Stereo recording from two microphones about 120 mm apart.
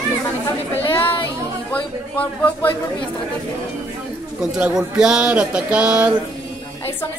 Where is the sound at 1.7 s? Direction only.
15° left (ahead or behind).